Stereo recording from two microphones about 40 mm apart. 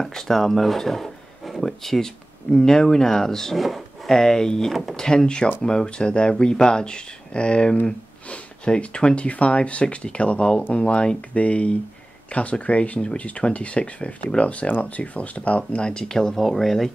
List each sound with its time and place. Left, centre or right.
0.0 s speech: centre
3.5 s speech: centre; by 15.8 s left
15.8 s speech: centre